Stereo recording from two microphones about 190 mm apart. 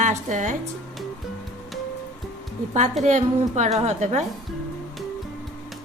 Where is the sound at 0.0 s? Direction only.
40° right (ahead or behind).